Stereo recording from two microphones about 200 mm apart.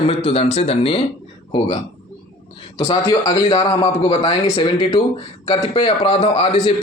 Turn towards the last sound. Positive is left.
turn(degrees=30)  # may be behind; listen again after turning